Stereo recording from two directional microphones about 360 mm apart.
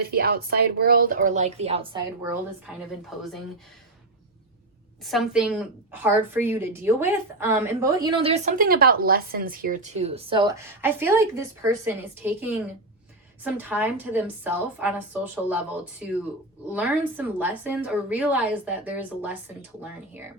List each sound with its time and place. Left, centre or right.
0.0 s speech: right
3.1 s a woman's voice: centre
5.0 s a woman's voice: centre